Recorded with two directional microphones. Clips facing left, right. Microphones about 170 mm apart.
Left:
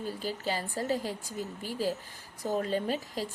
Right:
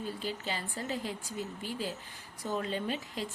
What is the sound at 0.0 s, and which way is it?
Speech, 40° left (ahead or behind).